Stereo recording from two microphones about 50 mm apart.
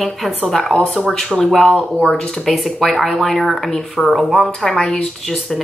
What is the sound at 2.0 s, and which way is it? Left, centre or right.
Speech, centre.